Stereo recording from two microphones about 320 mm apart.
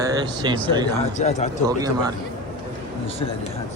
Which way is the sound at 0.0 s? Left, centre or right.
Centre.